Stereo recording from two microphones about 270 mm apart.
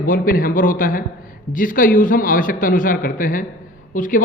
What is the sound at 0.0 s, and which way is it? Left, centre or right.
A man's voice, left.